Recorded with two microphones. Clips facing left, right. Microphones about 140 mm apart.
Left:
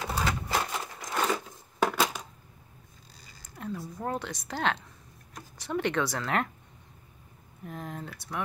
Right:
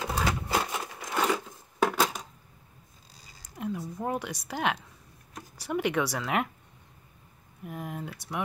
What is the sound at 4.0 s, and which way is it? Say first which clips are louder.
Speech: even; 10° right (ahead or behind).